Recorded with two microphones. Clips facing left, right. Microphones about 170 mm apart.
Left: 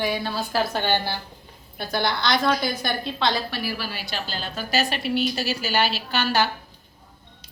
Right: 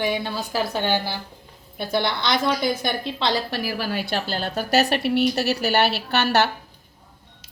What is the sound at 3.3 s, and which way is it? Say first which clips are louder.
A woman's voice: right 3 dB; 40° right (ahead or behind).